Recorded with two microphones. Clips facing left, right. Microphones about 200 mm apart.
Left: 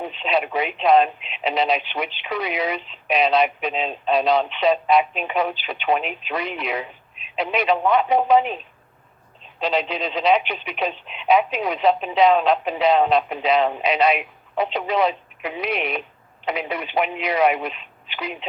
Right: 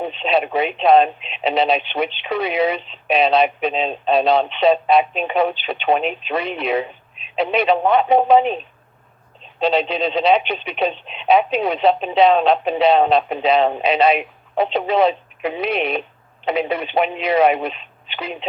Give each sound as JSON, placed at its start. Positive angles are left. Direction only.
{"t": 0.0, "sound": "speech", "side_deg": -30}
{"t": 9.6, "sound": "speech", "side_deg": -30}